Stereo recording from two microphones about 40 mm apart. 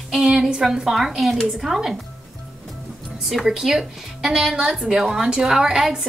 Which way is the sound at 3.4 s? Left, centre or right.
Centre.